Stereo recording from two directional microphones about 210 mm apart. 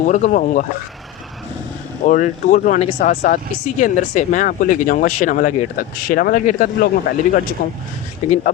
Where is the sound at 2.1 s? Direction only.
35° left (ahead or behind).